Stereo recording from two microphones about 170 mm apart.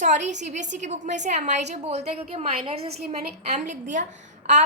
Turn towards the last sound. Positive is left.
turn(degrees=-40)  # may be behind; listen again after turning